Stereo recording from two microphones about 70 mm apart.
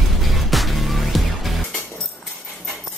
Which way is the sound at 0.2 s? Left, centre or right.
Centre.